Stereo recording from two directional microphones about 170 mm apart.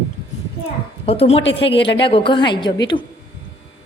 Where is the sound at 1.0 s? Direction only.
35° left (ahead or behind).